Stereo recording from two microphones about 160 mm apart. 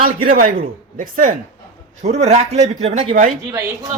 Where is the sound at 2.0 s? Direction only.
45° right (ahead or behind).